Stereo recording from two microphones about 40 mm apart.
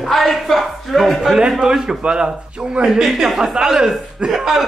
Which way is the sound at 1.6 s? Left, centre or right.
Centre.